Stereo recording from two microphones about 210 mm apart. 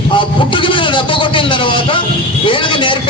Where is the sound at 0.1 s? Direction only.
25° left (ahead or behind).